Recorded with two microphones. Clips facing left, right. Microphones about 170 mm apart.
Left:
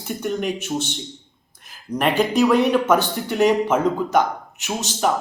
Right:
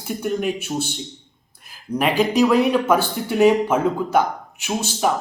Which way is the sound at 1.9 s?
5° right (ahead or behind).